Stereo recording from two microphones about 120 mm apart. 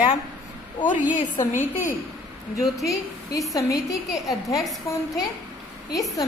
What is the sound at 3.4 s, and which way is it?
Speech, 25° left (ahead or behind).